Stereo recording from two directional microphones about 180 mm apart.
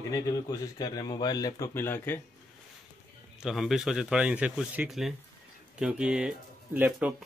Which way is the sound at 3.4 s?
Centre (ahead or behind).